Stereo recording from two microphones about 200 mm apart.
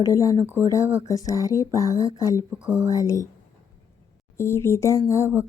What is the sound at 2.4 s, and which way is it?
Speech, 5° right (ahead or behind).